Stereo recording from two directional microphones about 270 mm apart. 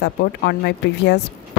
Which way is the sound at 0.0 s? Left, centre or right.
Left.